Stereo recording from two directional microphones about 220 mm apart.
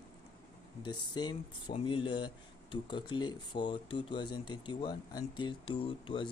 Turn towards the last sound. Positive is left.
turn(degrees=25)  # may be behind; listen again after turning